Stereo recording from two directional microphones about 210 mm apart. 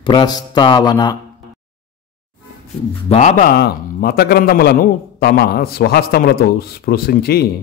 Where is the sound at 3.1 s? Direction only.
35° left (ahead or behind).